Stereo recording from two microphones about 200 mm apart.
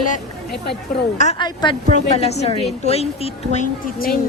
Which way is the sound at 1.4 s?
20° left (ahead or behind).